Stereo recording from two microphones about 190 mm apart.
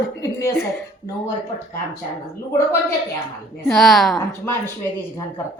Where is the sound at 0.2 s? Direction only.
15° left (ahead or behind).